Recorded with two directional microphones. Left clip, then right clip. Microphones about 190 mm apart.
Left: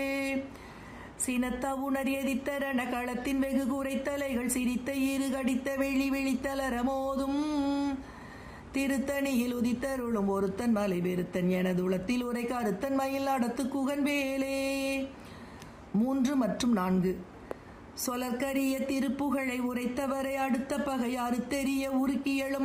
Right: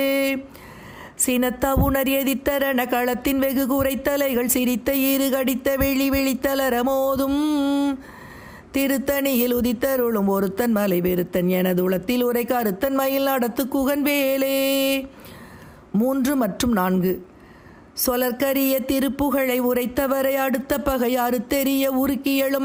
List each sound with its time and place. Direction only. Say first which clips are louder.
0.0 s a sound: right 12 dB; 40° right (ahead or behind)
1.2 s a woman's voice: right 11 dB; 45° right (ahead or behind)
16.0 s a woman's voice: right 9 dB; 40° right (ahead or behind)